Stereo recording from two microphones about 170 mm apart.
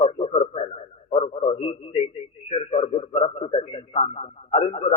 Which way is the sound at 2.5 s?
35° left (ahead or behind).